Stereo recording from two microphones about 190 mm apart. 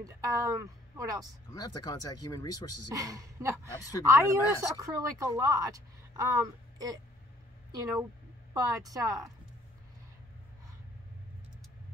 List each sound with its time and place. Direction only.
0.0 s a woman's voice: 15° right (ahead or behind)
1.5 s speech: 20° left (ahead or behind)
2.9 s a woman's voice: 20° right (ahead or behind)